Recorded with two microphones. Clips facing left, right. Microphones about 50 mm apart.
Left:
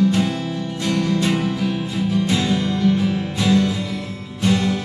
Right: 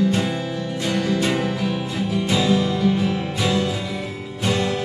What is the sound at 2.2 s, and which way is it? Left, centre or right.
Music, centre.